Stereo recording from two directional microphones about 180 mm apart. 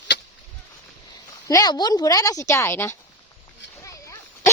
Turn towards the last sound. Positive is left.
turn(degrees=15)  # may be behind; listen again after turning